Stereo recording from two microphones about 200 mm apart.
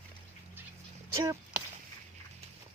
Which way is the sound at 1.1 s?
15° right (ahead or behind).